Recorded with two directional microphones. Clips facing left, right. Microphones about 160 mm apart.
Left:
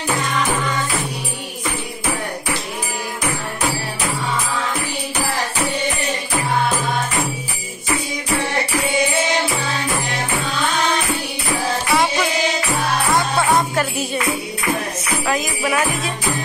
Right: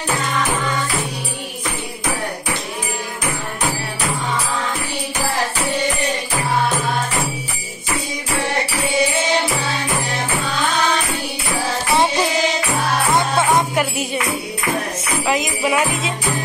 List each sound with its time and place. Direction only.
11.9 s music: 30° right (ahead or behind)
13.6 s jingle bell: 20° right (ahead or behind)
15.2 s jingle bell: 20° right (ahead or behind)